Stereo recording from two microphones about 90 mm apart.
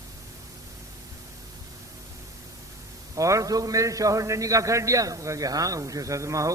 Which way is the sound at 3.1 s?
40° right (ahead or behind).